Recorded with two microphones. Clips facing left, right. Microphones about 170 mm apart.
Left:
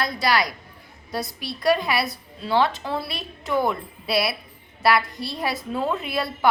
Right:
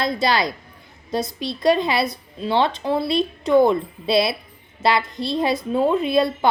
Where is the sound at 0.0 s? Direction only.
25° right (ahead or behind).